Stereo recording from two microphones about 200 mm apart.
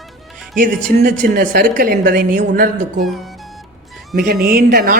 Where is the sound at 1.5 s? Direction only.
45° right (ahead or behind).